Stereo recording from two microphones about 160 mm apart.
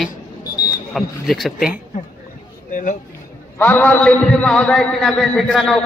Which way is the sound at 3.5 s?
10° left (ahead or behind).